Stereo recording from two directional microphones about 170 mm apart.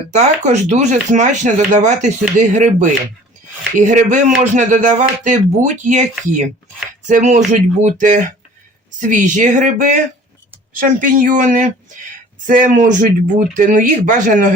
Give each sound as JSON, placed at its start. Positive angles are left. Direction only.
{"t": 0.1, "sound": "speech", "side_deg": -45}